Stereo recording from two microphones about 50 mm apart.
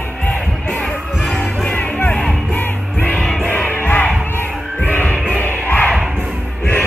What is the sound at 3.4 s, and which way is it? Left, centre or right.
Music, left.